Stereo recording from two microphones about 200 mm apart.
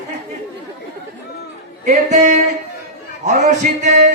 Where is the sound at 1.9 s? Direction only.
35° right (ahead or behind).